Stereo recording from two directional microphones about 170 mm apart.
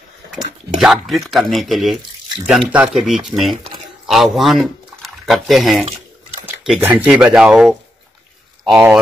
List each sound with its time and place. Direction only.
0.7 s speech: 5° right (ahead or behind)
6.4 s a sound: centre (ahead or behind)
7.1 s speech: 5° right (ahead or behind)